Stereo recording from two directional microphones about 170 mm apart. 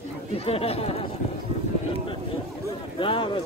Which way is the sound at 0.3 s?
35° left (ahead or behind).